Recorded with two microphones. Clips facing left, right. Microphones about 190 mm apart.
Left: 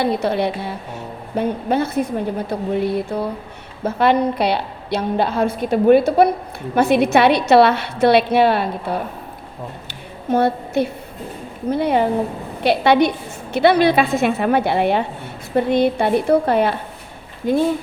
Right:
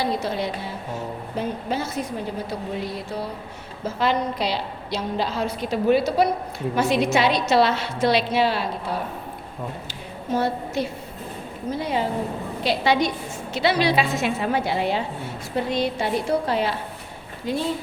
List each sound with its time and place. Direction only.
0.0 s a woman's voice: 65° left (ahead or behind)
10.2 s a woman's voice: 60° left (ahead or behind)